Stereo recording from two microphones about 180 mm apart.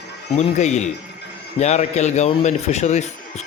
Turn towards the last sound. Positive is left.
turn(degrees=40)  # may be behind; listen again after turning